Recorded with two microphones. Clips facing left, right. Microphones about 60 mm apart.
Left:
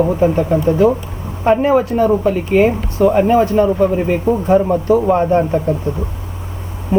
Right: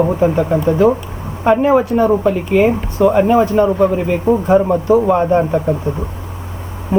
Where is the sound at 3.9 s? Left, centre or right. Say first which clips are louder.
Left 1 dB; centre.